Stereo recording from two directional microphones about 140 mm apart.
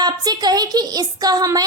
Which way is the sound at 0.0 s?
30° right (ahead or behind).